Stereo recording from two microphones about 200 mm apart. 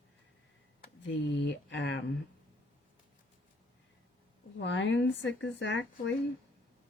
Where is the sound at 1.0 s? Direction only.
65° left (ahead or behind).